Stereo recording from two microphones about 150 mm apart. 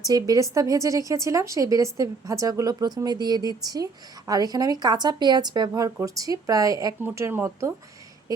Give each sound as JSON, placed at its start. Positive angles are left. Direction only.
{"t": 0.0, "sound": "speech", "side_deg": -25}